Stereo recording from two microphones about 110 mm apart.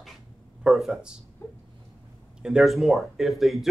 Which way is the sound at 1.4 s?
20° left (ahead or behind).